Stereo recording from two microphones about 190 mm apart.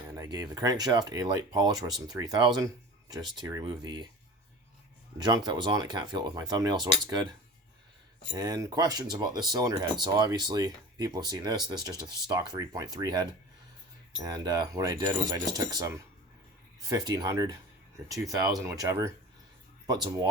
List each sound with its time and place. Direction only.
0.2 s speech: 20° right (ahead or behind)
5.1 s speech: 20° right (ahead or behind)